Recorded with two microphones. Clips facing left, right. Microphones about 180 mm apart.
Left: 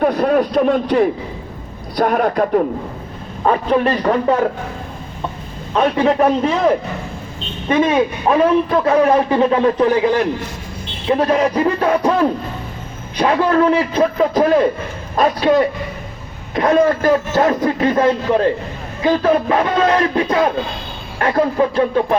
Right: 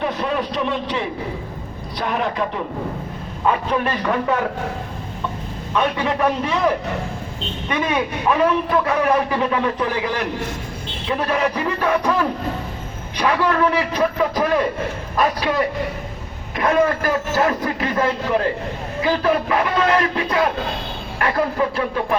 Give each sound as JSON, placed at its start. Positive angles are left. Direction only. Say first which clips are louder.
{"t": 0.0, "sound": "a man's voice", "louder": "left 8 dB", "side_deg": 50}
{"t": 3.4, "sound": "a man's voice", "louder": "left 5 dB", "side_deg": 35}
{"t": 5.7, "sound": "a man's voice", "louder": "left 6 dB", "side_deg": 35}